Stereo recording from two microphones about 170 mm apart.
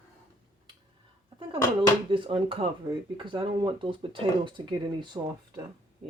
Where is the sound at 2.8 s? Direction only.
20° right (ahead or behind).